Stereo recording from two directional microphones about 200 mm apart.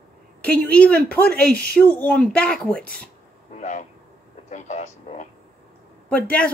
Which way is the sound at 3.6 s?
35° left (ahead or behind).